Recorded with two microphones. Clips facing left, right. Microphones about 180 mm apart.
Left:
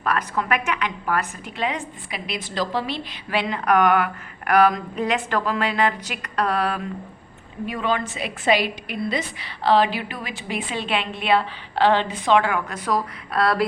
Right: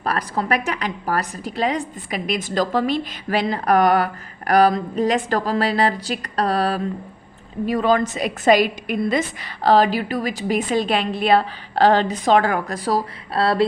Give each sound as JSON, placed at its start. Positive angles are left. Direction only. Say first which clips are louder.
{"t": 0.0, "sound": "a woman's voice", "louder": "right 1 dB", "side_deg": -35}